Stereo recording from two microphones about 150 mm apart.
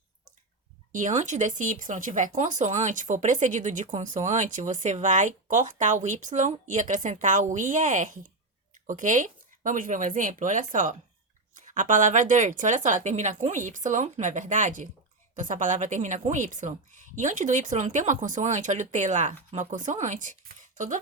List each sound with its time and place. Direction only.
0.9 s speech: 55° right (ahead or behind)